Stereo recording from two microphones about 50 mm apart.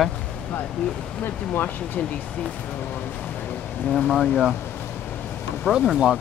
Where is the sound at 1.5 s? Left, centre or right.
Left.